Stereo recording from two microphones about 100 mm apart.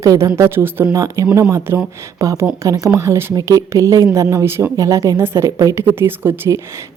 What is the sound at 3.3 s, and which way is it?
A woman's voice, 35° right (ahead or behind).